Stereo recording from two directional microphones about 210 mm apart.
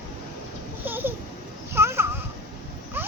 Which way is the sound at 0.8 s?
10° right (ahead or behind).